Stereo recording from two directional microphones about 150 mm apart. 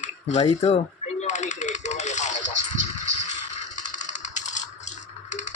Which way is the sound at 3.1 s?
50° left (ahead or behind).